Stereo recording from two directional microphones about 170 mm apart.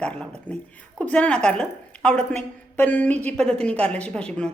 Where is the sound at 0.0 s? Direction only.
5° left (ahead or behind).